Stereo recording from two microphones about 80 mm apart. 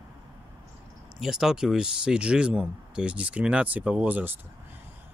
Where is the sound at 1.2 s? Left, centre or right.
Centre; by 4.3 s right.